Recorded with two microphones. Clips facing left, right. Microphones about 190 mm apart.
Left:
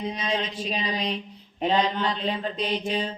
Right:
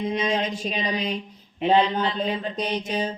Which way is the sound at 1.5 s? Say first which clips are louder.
Right 4 dB; 40° left (ahead or behind).